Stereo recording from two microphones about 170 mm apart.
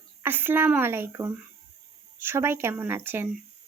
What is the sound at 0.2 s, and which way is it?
Speech, 10° right (ahead or behind).